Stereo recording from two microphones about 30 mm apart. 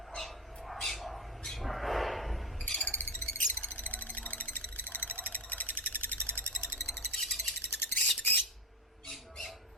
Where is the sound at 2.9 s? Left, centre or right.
Left.